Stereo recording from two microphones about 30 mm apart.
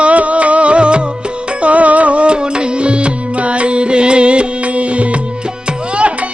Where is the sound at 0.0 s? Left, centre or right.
Right.